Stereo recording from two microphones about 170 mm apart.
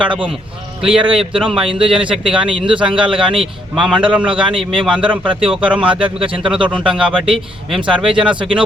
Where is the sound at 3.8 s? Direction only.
5° right (ahead or behind).